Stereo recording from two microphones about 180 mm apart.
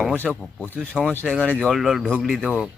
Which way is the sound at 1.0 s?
5° left (ahead or behind).